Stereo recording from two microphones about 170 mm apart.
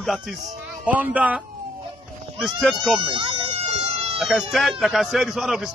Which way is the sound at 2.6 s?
Centre (ahead or behind).